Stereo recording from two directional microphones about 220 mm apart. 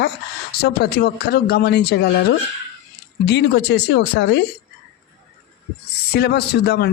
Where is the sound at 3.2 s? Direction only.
50° left (ahead or behind).